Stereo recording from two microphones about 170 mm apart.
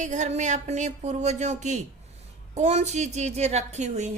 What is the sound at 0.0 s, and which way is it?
A woman's voice, 45° right (ahead or behind).